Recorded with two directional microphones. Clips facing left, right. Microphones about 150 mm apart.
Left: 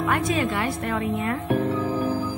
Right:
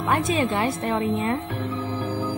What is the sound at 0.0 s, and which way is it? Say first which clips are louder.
A woman's voice: right 1 dB; 25° right (ahead or behind).